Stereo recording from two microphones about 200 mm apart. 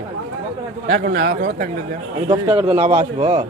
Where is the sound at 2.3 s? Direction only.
25° right (ahead or behind).